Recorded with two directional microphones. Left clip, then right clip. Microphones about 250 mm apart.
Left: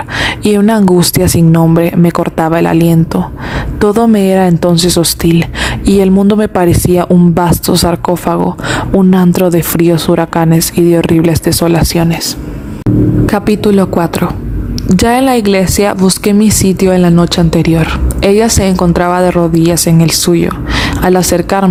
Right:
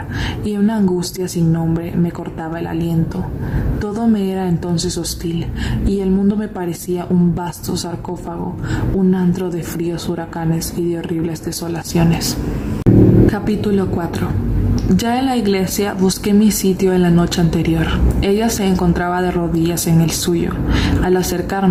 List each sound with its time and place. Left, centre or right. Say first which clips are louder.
0.2 s speech: left 11 dB; left
13.2 s speech: left 7 dB; left